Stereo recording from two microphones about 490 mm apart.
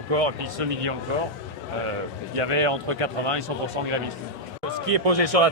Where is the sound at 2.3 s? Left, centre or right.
Right.